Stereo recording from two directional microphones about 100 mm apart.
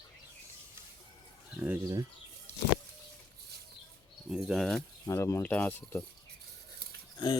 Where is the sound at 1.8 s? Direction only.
35° right (ahead or behind).